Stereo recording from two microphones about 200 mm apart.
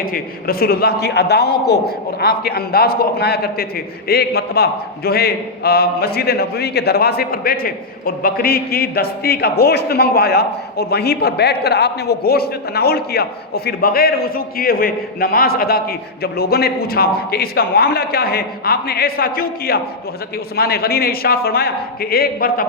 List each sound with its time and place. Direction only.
0.0 s a man's voice: 45° left (ahead or behind)